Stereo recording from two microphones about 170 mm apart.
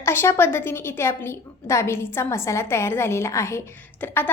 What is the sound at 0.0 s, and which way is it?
A woman's voice, 15° left (ahead or behind).